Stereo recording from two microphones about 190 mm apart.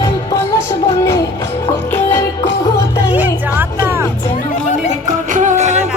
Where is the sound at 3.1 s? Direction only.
10° right (ahead or behind).